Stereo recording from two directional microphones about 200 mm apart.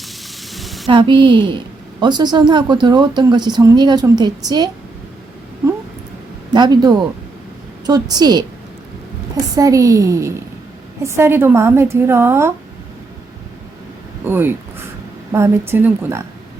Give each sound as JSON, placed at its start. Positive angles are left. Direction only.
{"t": 0.5, "sound": "a sound", "side_deg": 0}
{"t": 0.9, "sound": "speech", "side_deg": -25}
{"t": 6.5, "sound": "speech", "side_deg": -20}
{"t": 9.6, "sound": "a woman's voice", "side_deg": -15}
{"t": 14.3, "sound": "a woman's voice", "side_deg": -10}